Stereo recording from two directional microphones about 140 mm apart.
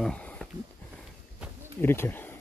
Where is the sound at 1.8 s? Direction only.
15° left (ahead or behind).